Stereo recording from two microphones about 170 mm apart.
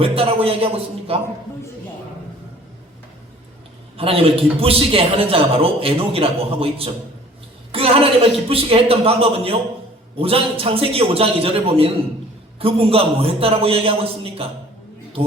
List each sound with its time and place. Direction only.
0.0 s a man's voice: 35° right (ahead or behind)
3.9 s a man's voice: 35° right (ahead or behind)